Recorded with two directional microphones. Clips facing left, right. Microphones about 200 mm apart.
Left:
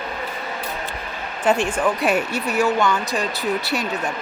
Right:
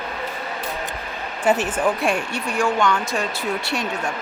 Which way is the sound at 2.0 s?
5° left (ahead or behind).